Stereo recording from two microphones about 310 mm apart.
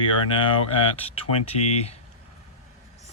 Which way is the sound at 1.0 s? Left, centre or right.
Centre.